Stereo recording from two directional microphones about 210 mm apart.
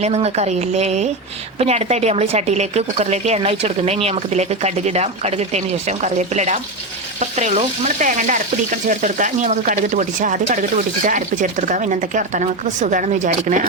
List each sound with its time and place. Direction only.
0.0 s a woman's voice: 30° right (ahead or behind)